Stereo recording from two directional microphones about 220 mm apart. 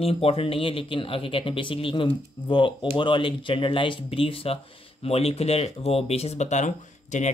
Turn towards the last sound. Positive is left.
turn(degrees=35)  # may be behind; listen again after turning